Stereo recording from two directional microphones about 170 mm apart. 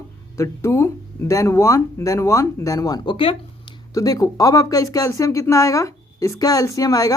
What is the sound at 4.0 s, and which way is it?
Speech, 20° left (ahead or behind).